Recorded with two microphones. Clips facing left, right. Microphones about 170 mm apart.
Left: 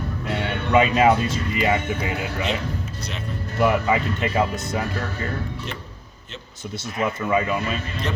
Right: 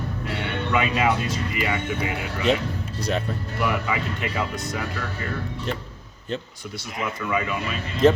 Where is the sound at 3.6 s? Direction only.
35° left (ahead or behind).